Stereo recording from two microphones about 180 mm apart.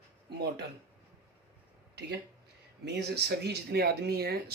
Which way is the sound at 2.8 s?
65° right (ahead or behind).